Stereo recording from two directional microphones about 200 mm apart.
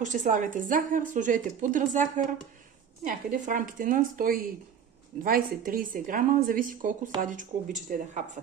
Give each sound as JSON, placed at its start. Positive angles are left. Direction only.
{"t": 0.0, "sound": "a woman's voice", "side_deg": -40}